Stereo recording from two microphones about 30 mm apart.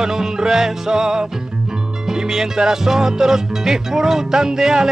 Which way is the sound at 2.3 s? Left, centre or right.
Centre.